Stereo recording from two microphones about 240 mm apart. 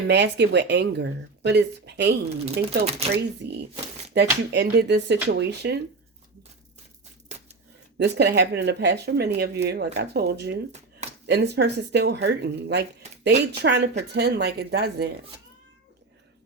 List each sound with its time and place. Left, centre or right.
0.1 s speech: right
2.3 s speech: right
3.4 s speech: right
7.9 s speech: right